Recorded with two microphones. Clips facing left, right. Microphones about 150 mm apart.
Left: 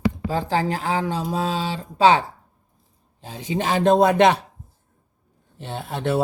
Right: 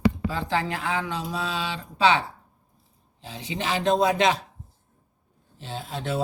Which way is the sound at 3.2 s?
45° left (ahead or behind).